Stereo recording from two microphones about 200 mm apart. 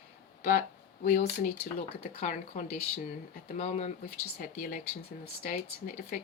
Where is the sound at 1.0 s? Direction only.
50° left (ahead or behind).